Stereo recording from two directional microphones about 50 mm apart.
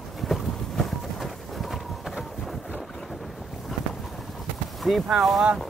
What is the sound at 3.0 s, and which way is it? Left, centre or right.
Wind noise, centre.